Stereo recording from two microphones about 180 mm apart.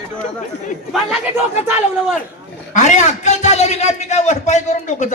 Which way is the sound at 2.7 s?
40° left (ahead or behind).